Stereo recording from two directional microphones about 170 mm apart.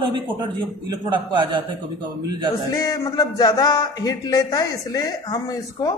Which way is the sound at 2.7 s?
20° left (ahead or behind).